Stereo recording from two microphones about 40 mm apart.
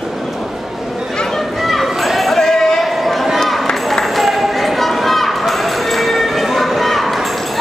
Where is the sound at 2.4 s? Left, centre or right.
Centre.